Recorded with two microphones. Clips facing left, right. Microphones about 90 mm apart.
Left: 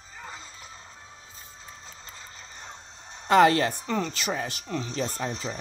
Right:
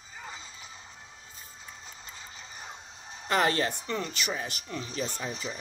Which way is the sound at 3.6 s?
35° left (ahead or behind).